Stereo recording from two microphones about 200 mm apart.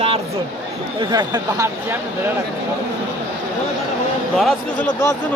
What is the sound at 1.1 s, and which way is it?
Speech, 20° right (ahead or behind).